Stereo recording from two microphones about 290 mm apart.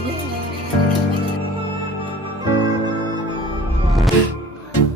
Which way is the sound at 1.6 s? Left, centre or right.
Centre.